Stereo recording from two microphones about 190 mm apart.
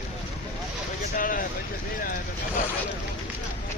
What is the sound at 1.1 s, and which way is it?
Speech, 45° left (ahead or behind).